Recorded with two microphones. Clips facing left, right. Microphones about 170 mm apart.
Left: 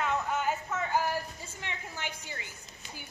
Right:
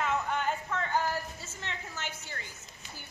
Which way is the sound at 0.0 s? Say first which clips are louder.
Even; centre (ahead or behind).